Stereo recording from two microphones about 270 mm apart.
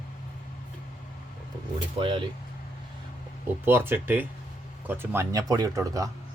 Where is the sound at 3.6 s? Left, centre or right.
Centre.